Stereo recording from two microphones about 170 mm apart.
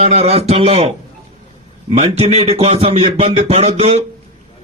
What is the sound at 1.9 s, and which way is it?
Speech, 35° right (ahead or behind).